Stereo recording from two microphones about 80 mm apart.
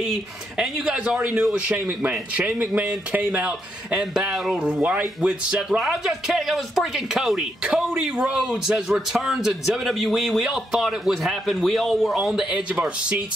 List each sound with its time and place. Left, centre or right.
0.6 s a man's voice: centre
0.9 s a man's voice: centre